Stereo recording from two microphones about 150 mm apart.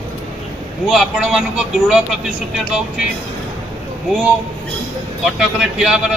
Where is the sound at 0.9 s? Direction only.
Centre (ahead or behind).